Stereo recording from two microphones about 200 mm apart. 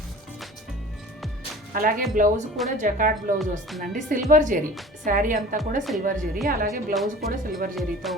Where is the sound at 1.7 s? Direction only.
45° right (ahead or behind).